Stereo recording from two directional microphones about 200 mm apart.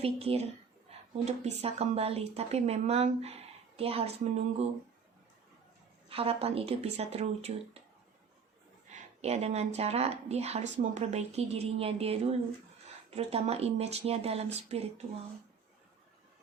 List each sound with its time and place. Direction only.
0.0 s a woman's voice: 30° right (ahead or behind)
6.1 s speech: 30° right (ahead or behind)
9.2 s speech: 30° right (ahead or behind)